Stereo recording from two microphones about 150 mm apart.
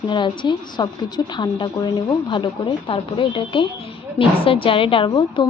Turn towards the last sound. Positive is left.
turn(degrees=30)  # may be behind; listen again after turning